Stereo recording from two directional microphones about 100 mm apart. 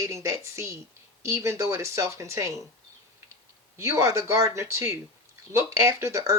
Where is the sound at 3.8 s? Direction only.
30° right (ahead or behind).